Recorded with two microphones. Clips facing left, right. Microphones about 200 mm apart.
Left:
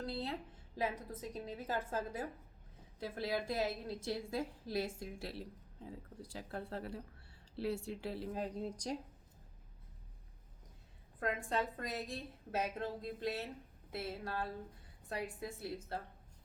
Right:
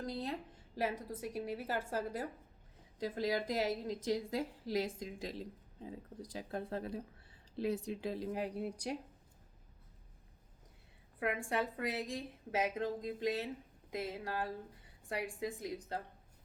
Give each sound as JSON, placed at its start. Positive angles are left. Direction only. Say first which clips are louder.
{"t": 0.0, "sound": "a sound", "louder": "right 1 dB", "side_deg": -15}
{"t": 0.8, "sound": "a woman's voice", "louder": "right 2 dB", "side_deg": -10}
{"t": 3.0, "sound": "a woman's voice", "louder": "right 3 dB", "side_deg": -15}
{"t": 11.4, "sound": "a woman's voice", "louder": "right 2 dB", "side_deg": -10}